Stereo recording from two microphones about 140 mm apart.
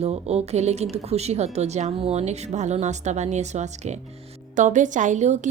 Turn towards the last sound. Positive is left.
turn(degrees=-55)  # may be behind; listen again after turning